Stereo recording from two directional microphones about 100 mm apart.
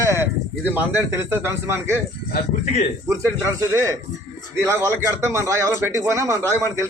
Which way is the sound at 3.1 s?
30° right (ahead or behind).